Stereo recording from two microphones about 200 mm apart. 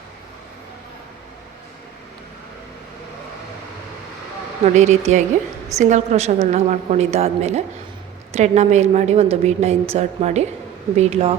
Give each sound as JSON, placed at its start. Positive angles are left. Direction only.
{"t": 4.6, "sound": "a woman's voice", "side_deg": -35}